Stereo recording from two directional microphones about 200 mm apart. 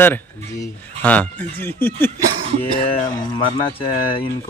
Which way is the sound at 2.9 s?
25° left (ahead or behind).